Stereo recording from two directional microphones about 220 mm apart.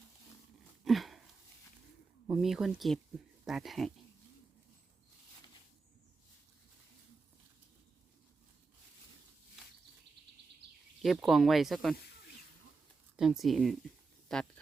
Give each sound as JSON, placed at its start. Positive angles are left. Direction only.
{"t": 0.9, "sound": "a sound", "side_deg": 0}
{"t": 2.2, "sound": "speech", "side_deg": -5}
{"t": 11.0, "sound": "speech", "side_deg": 0}
{"t": 13.1, "sound": "speech", "side_deg": 0}